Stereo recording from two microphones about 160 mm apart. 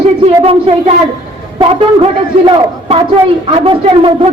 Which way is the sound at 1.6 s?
35° right (ahead or behind).